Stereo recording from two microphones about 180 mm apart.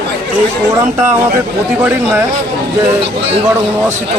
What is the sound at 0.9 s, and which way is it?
Speech, 40° right (ahead or behind).